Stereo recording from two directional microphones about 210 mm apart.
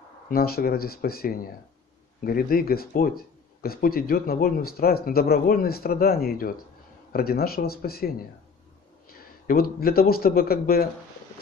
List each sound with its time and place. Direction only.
0.3 s speech: 45° left (ahead or behind)
9.1 s speech: 45° left (ahead or behind)